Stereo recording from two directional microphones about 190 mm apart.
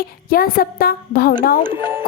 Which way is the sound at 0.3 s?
50° left (ahead or behind).